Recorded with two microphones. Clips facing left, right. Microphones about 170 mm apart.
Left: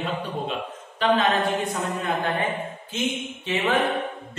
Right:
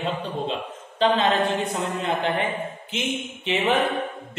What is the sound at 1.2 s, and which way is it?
Speech, 25° right (ahead or behind).